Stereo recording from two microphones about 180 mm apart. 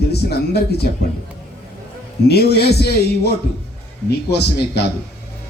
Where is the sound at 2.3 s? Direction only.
65° left (ahead or behind).